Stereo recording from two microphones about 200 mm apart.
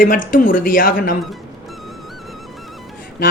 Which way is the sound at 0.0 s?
45° left (ahead or behind).